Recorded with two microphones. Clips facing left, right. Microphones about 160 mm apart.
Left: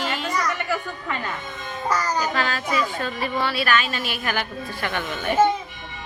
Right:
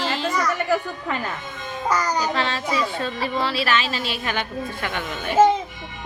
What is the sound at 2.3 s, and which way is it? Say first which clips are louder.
A woman's voice: even; 30° right (ahead or behind).